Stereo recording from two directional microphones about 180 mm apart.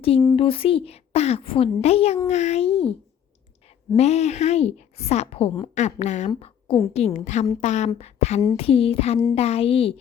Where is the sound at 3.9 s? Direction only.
35° left (ahead or behind).